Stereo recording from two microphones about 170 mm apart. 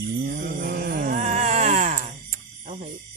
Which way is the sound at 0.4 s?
60° right (ahead or behind).